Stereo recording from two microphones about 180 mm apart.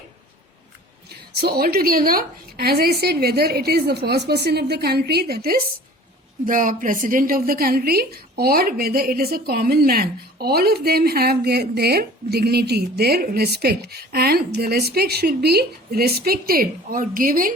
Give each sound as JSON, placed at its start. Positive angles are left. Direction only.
{"t": 1.4, "sound": "a woman's voice", "side_deg": -55}